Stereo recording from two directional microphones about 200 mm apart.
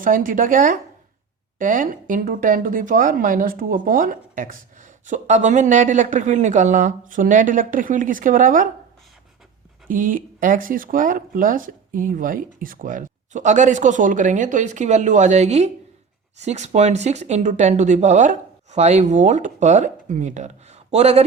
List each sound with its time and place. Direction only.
0.0 s speech: 40° right (ahead or behind)
9.9 s speech: 45° right (ahead or behind)